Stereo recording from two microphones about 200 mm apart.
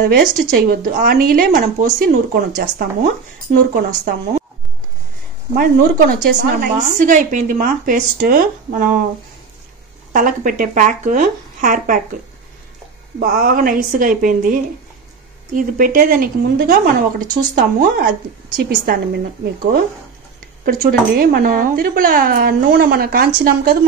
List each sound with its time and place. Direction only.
0.1 s a woman's voice: 50° right (ahead or behind)
5.6 s a woman's voice: 45° right (ahead or behind)
10.1 s speech: 45° right (ahead or behind)
13.2 s a woman's voice: 45° right (ahead or behind)
20.6 s a woman's voice: 50° right (ahead or behind)